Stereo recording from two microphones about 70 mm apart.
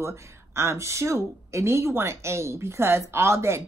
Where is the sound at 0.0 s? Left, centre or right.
Right.